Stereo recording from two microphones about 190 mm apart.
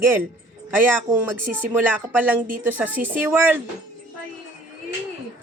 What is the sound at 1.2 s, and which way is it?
Speech, 10° right (ahead or behind).